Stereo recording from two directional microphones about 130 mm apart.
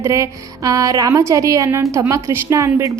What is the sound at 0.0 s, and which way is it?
A woman's voice, 25° right (ahead or behind).